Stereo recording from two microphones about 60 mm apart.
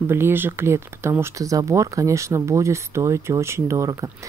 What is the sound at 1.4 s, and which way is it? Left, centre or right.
Speech, right.